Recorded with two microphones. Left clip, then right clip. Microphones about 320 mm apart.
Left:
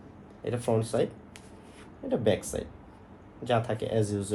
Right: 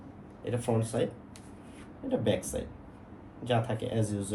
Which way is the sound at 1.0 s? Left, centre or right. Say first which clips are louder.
Left 3 dB; left.